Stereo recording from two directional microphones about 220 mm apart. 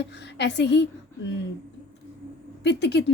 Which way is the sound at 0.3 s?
50° left (ahead or behind).